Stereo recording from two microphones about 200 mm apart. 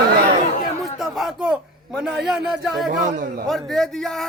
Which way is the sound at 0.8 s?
Centre (ahead or behind).